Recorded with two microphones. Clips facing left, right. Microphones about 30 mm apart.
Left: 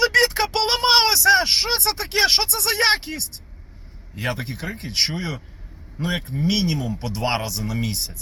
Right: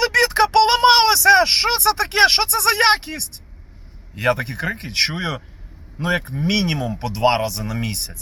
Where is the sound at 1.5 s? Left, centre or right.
Right.